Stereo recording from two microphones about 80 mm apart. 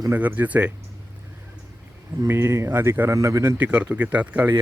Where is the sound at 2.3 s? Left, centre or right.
Right.